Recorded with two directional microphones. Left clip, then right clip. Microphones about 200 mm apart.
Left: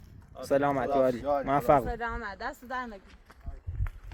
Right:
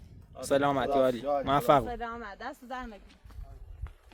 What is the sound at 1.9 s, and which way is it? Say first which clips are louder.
Speech: left 3 dB; 20° left (ahead or behind).